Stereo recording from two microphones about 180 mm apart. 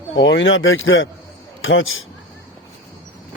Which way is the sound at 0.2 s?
85° left.